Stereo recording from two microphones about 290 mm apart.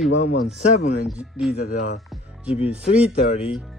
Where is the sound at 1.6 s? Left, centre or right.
Left.